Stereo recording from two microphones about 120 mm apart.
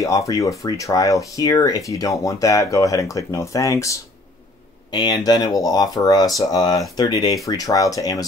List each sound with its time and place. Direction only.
0.0 s speech: 25° left (ahead or behind)